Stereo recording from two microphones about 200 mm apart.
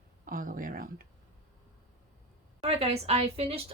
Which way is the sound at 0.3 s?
45° right (ahead or behind).